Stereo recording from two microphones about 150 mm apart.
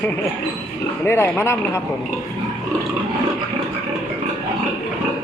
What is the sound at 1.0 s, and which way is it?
Speech, 15° left (ahead or behind).